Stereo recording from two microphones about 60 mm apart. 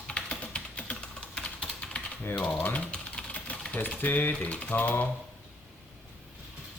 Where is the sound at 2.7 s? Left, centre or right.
Centre.